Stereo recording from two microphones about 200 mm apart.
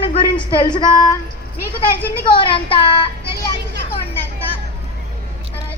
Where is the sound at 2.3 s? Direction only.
25° left (ahead or behind).